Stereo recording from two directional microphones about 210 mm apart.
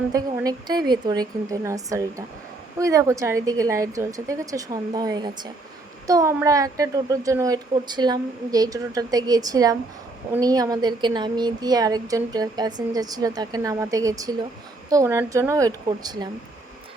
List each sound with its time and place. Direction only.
0.1 s a woman's voice: 15° right (ahead or behind)